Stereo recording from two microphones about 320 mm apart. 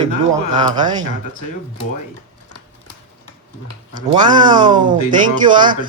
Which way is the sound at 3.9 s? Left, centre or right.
Centre.